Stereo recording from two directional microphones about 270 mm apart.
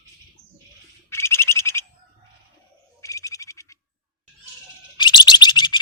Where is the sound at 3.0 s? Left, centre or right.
Centre.